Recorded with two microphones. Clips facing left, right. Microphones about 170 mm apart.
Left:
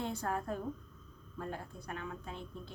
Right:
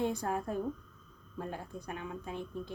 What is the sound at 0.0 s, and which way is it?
A woman's voice, 15° right (ahead or behind).